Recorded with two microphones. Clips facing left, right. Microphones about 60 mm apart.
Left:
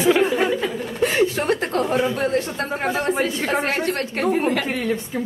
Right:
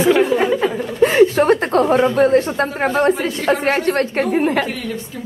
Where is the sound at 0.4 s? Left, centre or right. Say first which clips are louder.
Right 4 dB; right.